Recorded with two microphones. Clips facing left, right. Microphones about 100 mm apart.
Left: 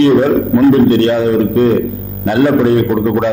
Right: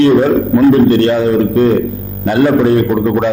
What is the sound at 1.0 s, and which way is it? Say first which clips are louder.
Speech: even; 20° right (ahead or behind).